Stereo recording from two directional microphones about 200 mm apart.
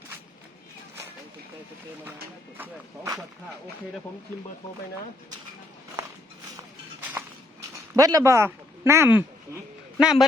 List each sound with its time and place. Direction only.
2.6 s speech: 15° right (ahead or behind)
7.9 s a man's voice: 15° right (ahead or behind)